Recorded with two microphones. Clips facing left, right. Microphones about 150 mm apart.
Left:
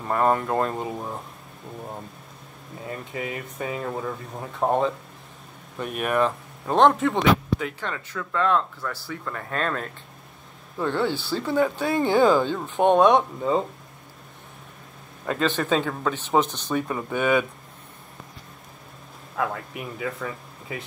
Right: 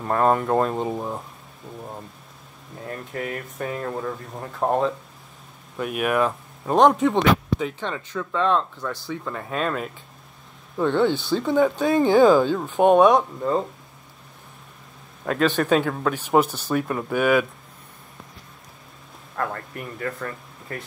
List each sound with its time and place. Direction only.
0.0 s speech: centre (ahead or behind)
2.8 s speech: centre (ahead or behind)
7.1 s a sound: centre (ahead or behind)
8.2 s speech: 15° right (ahead or behind)
10.8 s speech: 5° left (ahead or behind)
12.2 s speech: 10° right (ahead or behind)
15.2 s speech: 5° right (ahead or behind)
19.3 s a man's voice: 5° left (ahead or behind)